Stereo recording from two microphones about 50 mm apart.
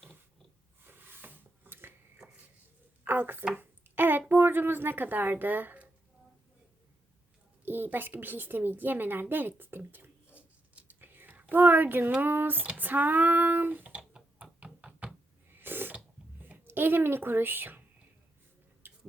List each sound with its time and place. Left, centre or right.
0.9 s a sound: right
3.0 s a sound: right
4.3 s speech: right
7.6 s speech: right
10.2 s whispering: right
11.3 s a sound: right
12.2 s speech: right
12.6 s speech: right
14.1 s knock: right
15.4 s a sound: right
16.4 s speech: right
18.8 s tick-tock: right